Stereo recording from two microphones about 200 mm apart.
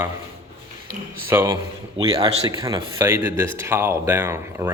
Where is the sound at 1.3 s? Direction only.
15° right (ahead or behind).